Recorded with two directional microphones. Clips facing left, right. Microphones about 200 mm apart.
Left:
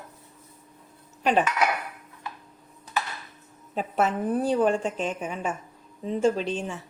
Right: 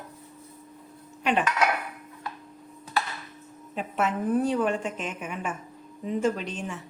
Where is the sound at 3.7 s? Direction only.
35° left (ahead or behind).